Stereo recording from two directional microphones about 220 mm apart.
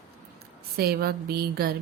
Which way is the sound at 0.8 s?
45° right (ahead or behind).